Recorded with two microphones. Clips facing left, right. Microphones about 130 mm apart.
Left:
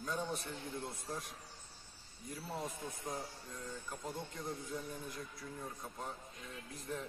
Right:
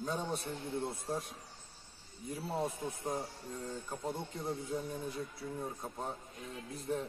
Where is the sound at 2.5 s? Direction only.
30° right (ahead or behind).